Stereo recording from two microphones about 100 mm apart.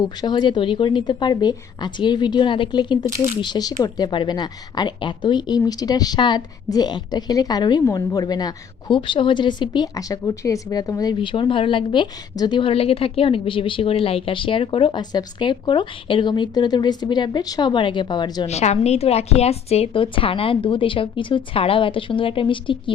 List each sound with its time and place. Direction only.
0.0 s a woman's voice: 45° left (ahead or behind)
11.2 s a woman's voice: 55° left (ahead or behind)
12.7 s a woman's voice: 75° left (ahead or behind); by 18.4 s 45° left (ahead or behind)
18.4 s a woman's voice: 90° left; by 22.8 s 55° left (ahead or behind)